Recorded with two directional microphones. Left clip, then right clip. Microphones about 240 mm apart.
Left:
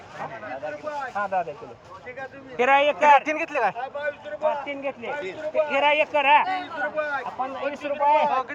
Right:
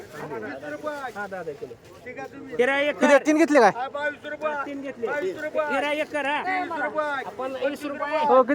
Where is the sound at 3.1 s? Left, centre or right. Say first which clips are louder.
Right 2 dB; right.